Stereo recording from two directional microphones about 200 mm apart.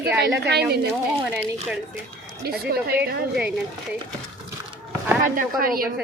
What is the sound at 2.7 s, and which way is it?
Speech, 50° right (ahead or behind).